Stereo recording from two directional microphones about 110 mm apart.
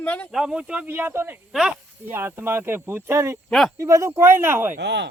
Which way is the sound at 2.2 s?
25° right (ahead or behind).